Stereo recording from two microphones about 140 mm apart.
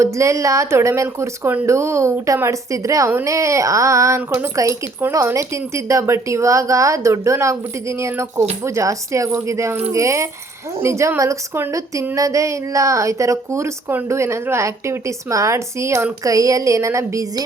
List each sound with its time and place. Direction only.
0.0 s a woman's voice: 20° right (ahead or behind)